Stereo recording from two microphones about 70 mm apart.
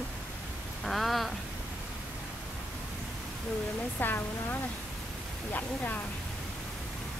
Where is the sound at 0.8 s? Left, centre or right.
Centre.